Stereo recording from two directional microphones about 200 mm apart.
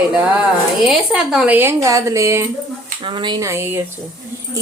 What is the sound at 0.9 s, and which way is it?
Speech, centre (ahead or behind).